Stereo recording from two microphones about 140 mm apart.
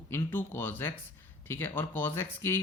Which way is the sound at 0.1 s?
15° left (ahead or behind).